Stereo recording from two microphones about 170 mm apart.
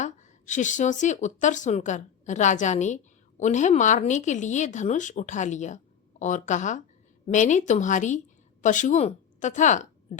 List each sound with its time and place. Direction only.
0.0 s a woman's voice: 45° left (ahead or behind)